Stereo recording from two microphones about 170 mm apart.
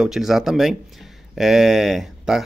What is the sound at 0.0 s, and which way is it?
Speech, centre (ahead or behind).